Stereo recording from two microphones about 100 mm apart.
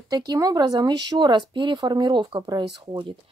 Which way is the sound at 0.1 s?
40° right (ahead or behind).